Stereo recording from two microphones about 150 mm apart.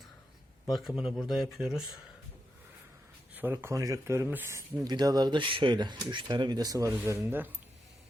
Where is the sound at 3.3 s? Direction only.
15° right (ahead or behind).